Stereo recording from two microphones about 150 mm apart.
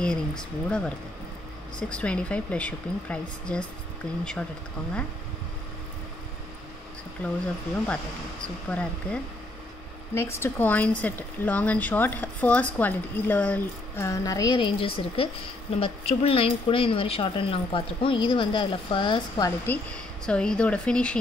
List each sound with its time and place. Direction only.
0.0 s speech: 5° left (ahead or behind)
8.6 s speech: 10° left (ahead or behind); by 19.5 s 30° left (ahead or behind)
19.6 s speech: 10° left (ahead or behind)